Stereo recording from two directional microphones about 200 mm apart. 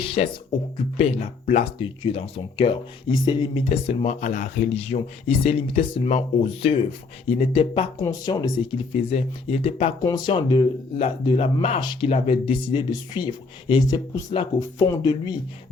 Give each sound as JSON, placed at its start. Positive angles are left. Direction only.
{"t": 0.0, "sound": "speech", "side_deg": 30}